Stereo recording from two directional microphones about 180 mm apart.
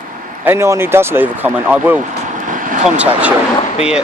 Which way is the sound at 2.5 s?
45° right (ahead or behind).